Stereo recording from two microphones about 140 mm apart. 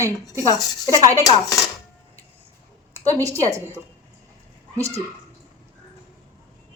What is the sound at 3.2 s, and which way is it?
Speech, 25° right (ahead or behind).